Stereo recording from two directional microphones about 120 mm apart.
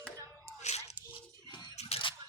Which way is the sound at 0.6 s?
70° left (ahead or behind).